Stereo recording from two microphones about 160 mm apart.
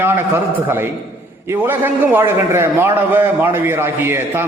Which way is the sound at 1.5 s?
15° right (ahead or behind).